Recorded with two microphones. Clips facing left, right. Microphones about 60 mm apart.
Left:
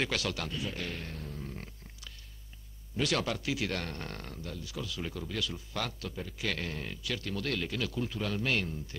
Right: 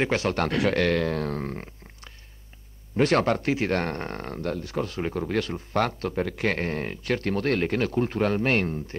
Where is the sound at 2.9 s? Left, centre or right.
Right.